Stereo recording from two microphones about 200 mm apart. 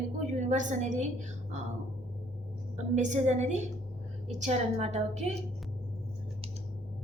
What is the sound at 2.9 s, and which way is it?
A woman's voice, 35° right (ahead or behind).